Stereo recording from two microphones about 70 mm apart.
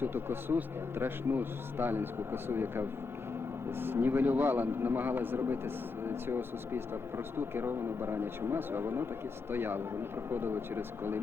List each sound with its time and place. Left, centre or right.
0.0 s a man's voice: right